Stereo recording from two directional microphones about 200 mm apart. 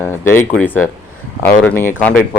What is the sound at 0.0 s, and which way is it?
Speech, 10° left (ahead or behind).